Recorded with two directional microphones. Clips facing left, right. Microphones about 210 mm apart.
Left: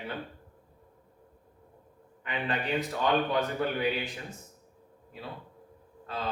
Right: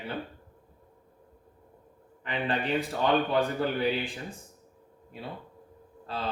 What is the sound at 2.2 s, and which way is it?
A man's voice, 30° right (ahead or behind).